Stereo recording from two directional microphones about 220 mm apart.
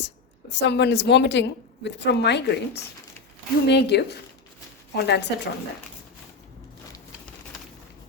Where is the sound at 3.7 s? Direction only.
50° left (ahead or behind).